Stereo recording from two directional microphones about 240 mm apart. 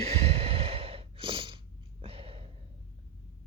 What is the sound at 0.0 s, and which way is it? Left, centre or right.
Breathing, right.